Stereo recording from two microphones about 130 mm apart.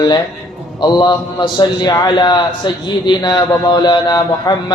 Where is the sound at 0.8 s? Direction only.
35° left (ahead or behind).